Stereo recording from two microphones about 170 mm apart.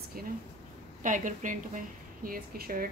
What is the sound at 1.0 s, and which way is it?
A woman's voice, 50° right (ahead or behind).